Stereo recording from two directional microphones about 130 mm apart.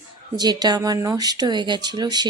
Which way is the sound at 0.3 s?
30° right (ahead or behind).